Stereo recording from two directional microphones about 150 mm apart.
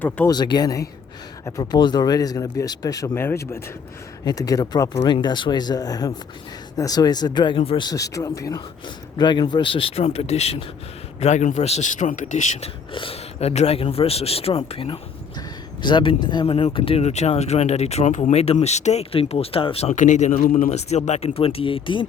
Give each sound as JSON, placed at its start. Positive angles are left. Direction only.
{"t": 0.3, "sound": "speech", "side_deg": 30}
{"t": 7.9, "sound": "speech", "side_deg": 25}
{"t": 19.9, "sound": "speech", "side_deg": 55}